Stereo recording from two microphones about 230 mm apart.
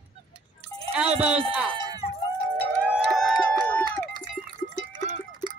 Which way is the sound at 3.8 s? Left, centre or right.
Centre.